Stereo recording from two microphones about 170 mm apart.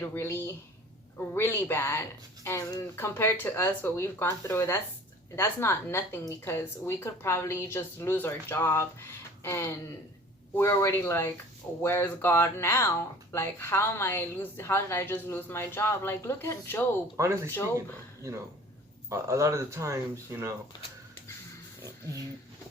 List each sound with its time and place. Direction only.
0.0 s a woman's voice: 15° left (ahead or behind)
17.2 s speech: 15° right (ahead or behind)